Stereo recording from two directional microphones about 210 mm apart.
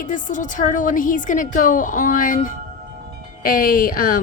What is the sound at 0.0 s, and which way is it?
A woman's voice, 40° left (ahead or behind).